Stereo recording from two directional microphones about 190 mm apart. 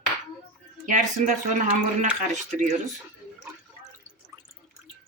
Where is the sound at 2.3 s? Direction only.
40° right (ahead or behind).